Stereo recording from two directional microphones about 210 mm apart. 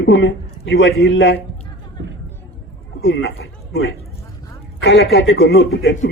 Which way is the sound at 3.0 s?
55° left (ahead or behind).